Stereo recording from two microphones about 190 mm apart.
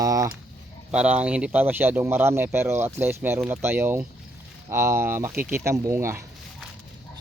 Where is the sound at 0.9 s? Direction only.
5° right (ahead or behind).